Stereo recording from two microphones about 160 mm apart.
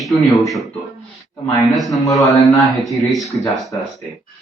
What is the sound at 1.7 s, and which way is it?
Speech, centre (ahead or behind).